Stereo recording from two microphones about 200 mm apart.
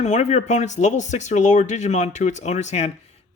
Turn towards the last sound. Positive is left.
turn(degrees=35)  # may be behind; listen again after turning